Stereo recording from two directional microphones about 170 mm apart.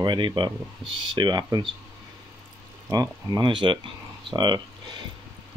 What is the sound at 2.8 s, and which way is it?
Speech, 20° right (ahead or behind).